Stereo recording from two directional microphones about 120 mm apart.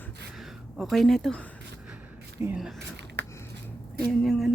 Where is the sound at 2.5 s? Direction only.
5° right (ahead or behind).